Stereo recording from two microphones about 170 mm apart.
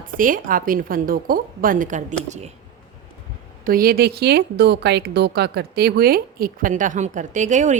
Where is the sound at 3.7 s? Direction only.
60° right (ahead or behind).